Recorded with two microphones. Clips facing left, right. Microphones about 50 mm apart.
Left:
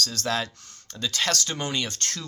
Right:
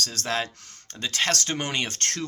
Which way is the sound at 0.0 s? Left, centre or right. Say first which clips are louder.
Left 1 dB; right.